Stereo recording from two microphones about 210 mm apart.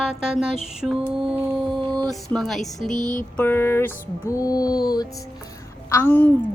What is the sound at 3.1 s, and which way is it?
A woman's voice, 10° left (ahead or behind).